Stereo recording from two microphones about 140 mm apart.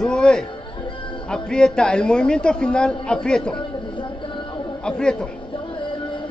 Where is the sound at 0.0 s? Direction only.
5° left (ahead or behind).